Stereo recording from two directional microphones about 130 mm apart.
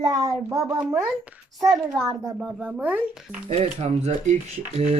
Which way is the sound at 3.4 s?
50° right (ahead or behind).